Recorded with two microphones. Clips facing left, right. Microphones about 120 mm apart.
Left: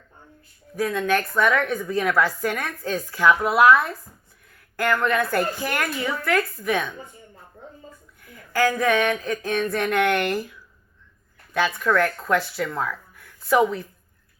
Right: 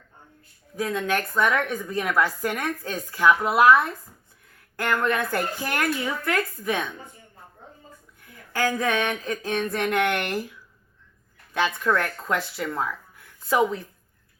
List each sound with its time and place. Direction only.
0.8 s a woman's voice: 20° right (ahead or behind)
4.8 s speech: 20° right (ahead or behind)
8.5 s speech: 25° right (ahead or behind)
11.5 s speech: 20° right (ahead or behind)